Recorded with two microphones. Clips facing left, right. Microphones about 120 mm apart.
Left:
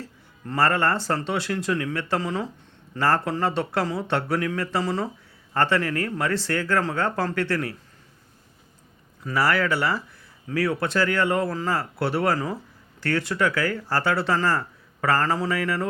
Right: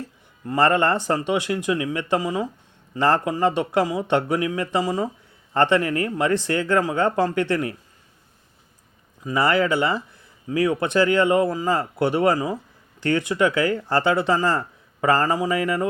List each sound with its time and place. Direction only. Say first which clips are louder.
0.0 s speech: right 4 dB; 15° right (ahead or behind)
9.2 s speech: right 3 dB; 20° right (ahead or behind)